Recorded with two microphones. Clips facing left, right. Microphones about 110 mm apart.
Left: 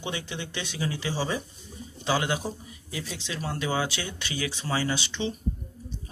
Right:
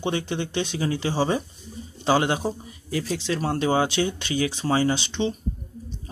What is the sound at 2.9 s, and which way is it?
Speech, 45° right (ahead or behind).